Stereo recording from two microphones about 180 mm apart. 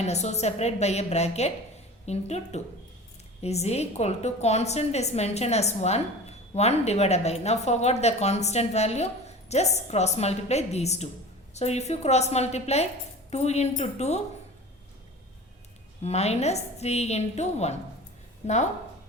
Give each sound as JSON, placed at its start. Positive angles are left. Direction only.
{"t": 0.0, "sound": "a woman's voice", "side_deg": 40}
{"t": 16.0, "sound": "a woman's voice", "side_deg": 35}